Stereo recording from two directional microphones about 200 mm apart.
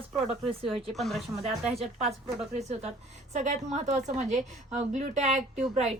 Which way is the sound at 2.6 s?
35° right (ahead or behind).